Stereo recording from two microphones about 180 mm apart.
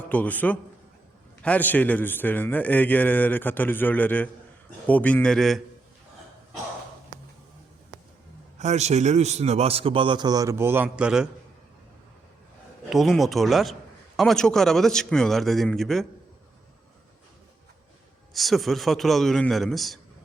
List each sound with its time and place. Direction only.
0.1 s a man's voice: 10° left (ahead or behind)
8.5 s a man's voice: 40° right (ahead or behind); by 11.3 s 5° right (ahead or behind)
12.9 s a man's voice: centre (ahead or behind)
18.3 s a man's voice: centre (ahead or behind)